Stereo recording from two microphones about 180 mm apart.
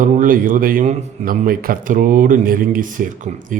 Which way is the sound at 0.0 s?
50° right (ahead or behind).